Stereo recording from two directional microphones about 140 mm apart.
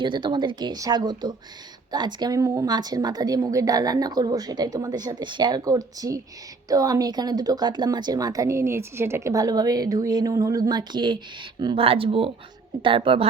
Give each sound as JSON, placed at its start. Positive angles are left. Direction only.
{"t": 0.0, "sound": "speech", "side_deg": -35}